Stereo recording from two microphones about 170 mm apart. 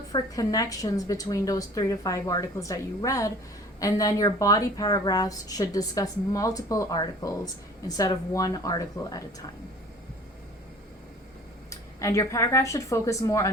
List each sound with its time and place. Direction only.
0.1 s speech: 20° left (ahead or behind)
11.7 s speech: 20° left (ahead or behind)